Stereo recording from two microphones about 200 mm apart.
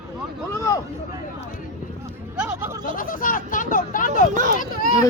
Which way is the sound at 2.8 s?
45° left (ahead or behind).